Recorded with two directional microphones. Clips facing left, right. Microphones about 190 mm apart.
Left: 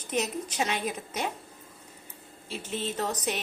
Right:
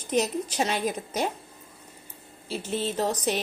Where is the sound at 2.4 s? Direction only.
30° right (ahead or behind).